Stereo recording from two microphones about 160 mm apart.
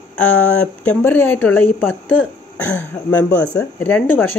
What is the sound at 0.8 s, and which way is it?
Speech, 10° left (ahead or behind).